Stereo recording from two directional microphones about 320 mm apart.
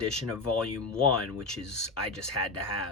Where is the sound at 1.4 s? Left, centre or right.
Centre.